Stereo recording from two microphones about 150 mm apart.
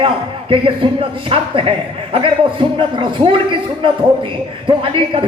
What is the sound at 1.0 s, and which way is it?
A man's voice, 35° right (ahead or behind).